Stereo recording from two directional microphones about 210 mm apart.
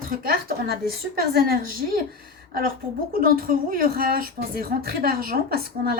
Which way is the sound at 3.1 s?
45° right (ahead or behind).